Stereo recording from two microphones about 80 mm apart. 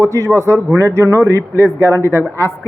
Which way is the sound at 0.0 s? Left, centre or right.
Right.